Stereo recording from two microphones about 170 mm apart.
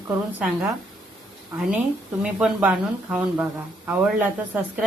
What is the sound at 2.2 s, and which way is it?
Speech, 5° right (ahead or behind).